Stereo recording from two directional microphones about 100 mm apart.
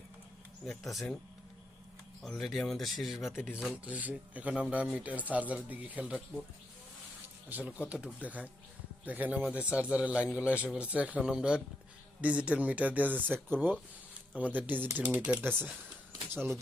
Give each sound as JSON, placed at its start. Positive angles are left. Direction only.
{"t": 0.6, "sound": "speech", "side_deg": 0}
{"t": 2.2, "sound": "speech", "side_deg": 0}
{"t": 7.4, "sound": "speech", "side_deg": -15}